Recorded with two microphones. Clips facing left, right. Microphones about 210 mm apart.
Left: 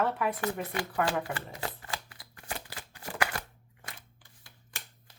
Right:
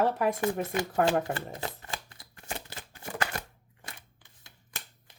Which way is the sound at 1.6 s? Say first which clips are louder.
Even; 20° right (ahead or behind).